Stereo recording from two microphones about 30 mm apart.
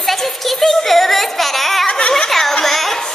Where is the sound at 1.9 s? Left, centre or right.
Left.